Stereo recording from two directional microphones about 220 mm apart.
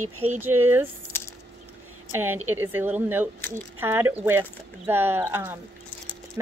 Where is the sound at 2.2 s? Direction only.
10° right (ahead or behind).